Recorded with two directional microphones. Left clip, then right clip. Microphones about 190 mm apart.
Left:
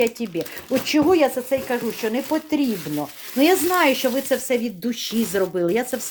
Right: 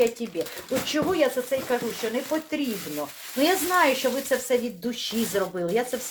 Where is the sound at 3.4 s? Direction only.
65° left (ahead or behind).